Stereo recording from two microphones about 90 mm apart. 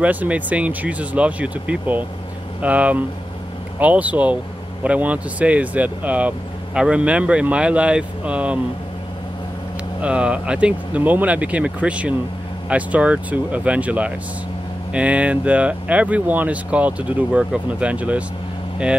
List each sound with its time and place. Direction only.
0.0 s speech: 15° right (ahead or behind)
10.0 s speech: 15° right (ahead or behind)